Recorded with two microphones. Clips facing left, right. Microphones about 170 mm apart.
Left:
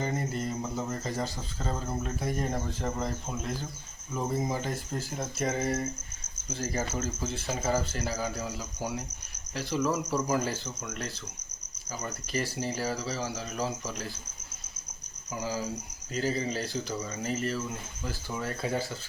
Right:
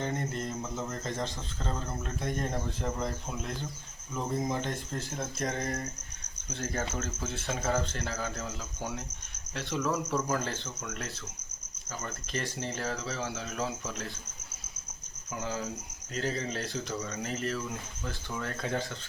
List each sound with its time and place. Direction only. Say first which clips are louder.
0.0 s mantra: left 2 dB; 5° left (ahead or behind)
0.8 s speech: left 1 dB; 5° left (ahead or behind)
9.6 s speech: left 2 dB; centre (ahead or behind)
10.8 s speech: left 1 dB; centre (ahead or behind)
15.3 s speech: left 2 dB; centre (ahead or behind)